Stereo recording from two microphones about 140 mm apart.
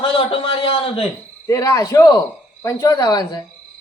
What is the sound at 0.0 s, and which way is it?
A man's voice, 40° left (ahead or behind).